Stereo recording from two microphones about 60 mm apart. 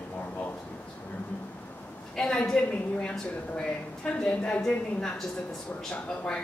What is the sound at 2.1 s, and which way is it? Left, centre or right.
A woman's voice, centre.